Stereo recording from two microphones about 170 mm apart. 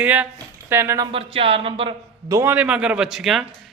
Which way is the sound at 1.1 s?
35° right (ahead or behind).